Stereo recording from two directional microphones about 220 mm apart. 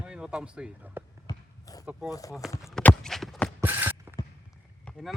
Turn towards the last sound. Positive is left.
turn(degrees=0)  # may be behind; listen again after turning